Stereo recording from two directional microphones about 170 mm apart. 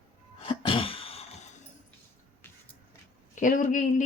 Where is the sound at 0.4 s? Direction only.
30° left (ahead or behind).